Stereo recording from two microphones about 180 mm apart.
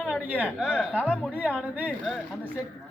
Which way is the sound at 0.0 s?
Centre (ahead or behind).